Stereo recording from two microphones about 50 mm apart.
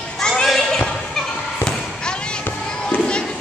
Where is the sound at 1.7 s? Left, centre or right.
Centre.